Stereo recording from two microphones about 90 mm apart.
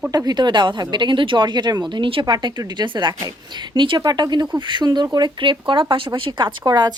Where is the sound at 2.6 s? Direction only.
55° right (ahead or behind).